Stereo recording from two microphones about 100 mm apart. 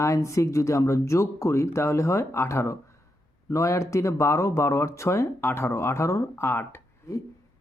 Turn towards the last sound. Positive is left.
turn(degrees=25)  # may be behind; listen again after turning